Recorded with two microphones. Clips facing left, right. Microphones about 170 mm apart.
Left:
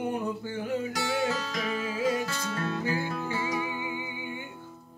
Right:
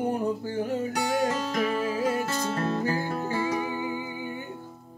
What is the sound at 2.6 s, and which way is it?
Music, 45° right (ahead or behind).